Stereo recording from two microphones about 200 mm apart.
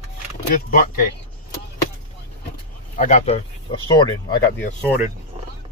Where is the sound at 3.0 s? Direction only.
30° left (ahead or behind).